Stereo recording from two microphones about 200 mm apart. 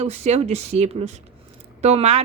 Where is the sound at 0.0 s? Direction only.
35° right (ahead or behind).